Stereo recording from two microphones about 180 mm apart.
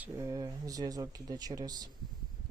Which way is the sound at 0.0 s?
15° right (ahead or behind).